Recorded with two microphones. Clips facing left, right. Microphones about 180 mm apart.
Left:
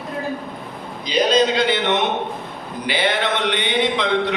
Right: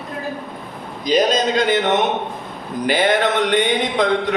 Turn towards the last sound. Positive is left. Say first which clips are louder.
# right 1 dB
turn(degrees=-45)  # may be behind; listen again after turning